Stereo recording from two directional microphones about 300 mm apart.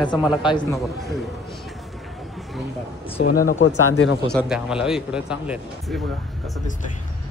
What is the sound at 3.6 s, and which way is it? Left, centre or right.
Speech, left.